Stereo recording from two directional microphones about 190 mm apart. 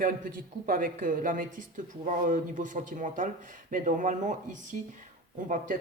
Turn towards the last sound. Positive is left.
turn(degrees=-45)  # may be behind; listen again after turning